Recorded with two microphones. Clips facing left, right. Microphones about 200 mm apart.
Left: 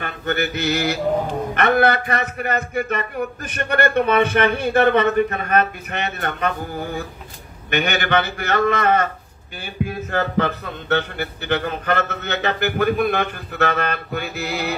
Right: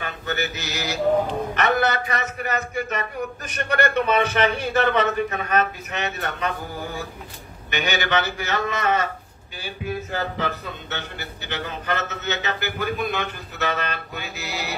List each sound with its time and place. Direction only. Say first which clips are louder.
0.0 s mantra: left 4 dB; 55° left (ahead or behind)
1.5 s a man's voice: left 7 dB; 55° left (ahead or behind)
7.7 s a man's voice: left 4 dB; 55° left (ahead or behind)
10.1 s a man's voice: left 10 dB; 55° left (ahead or behind)